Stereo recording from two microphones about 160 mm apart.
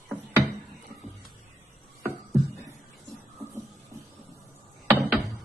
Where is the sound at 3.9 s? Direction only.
20° right (ahead or behind).